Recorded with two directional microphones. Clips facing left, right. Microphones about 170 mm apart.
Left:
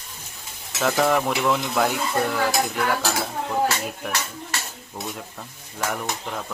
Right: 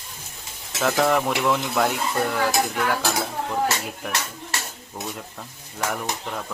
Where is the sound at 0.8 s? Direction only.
Centre (ahead or behind).